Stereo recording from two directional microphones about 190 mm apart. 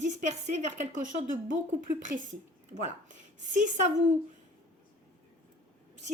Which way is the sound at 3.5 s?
40° right (ahead or behind).